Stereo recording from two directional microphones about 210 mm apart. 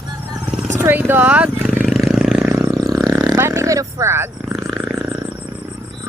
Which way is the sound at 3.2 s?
15° right (ahead or behind).